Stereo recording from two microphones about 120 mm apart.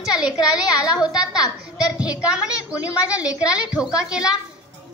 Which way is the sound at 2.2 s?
10° right (ahead or behind).